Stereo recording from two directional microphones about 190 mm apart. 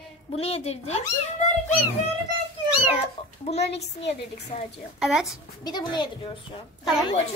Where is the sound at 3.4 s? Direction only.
35° left (ahead or behind).